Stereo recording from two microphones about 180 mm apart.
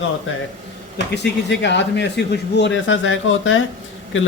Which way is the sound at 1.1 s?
75° left (ahead or behind).